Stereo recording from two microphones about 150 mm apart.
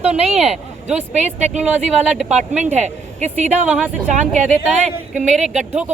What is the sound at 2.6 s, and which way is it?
Speech, 50° right (ahead or behind).